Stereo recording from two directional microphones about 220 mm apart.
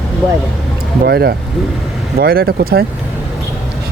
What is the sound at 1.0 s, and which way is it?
Speech, 45° right (ahead or behind).